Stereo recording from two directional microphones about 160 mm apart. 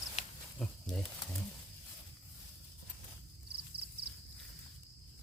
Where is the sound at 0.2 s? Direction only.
40° left (ahead or behind).